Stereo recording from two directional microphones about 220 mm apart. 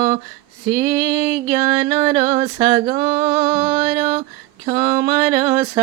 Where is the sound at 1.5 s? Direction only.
25° right (ahead or behind).